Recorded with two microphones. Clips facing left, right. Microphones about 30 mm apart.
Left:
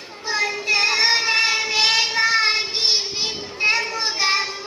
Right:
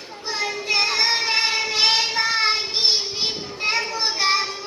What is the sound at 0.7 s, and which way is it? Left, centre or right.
Child singing, left.